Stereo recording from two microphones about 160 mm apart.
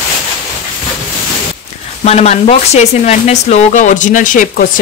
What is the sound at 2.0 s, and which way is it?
Speech, 40° left (ahead or behind).